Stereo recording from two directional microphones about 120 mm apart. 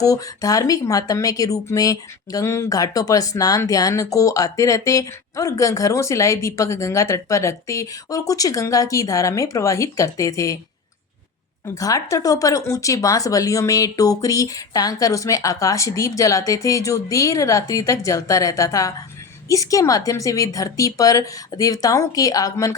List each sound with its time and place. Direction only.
0.0 s speech: 30° left (ahead or behind)
11.6 s speech: 30° left (ahead or behind)